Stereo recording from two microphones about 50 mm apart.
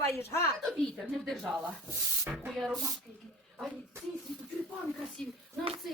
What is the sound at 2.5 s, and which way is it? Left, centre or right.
Speech, centre.